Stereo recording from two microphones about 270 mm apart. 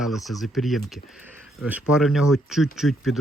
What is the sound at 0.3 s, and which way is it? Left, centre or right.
Speech, centre.